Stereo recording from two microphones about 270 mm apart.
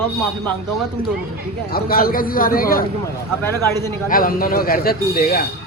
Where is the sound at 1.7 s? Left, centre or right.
Left.